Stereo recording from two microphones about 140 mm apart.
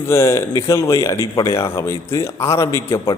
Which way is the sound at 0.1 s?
20° left (ahead or behind).